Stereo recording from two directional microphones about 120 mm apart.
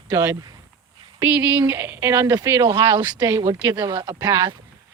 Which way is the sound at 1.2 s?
10° right (ahead or behind).